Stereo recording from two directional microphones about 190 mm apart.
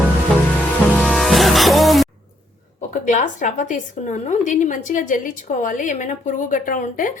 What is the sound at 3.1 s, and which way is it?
A woman's voice, 40° left (ahead or behind).